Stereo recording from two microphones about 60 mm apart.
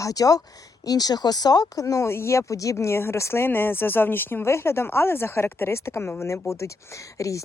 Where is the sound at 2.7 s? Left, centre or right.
Left.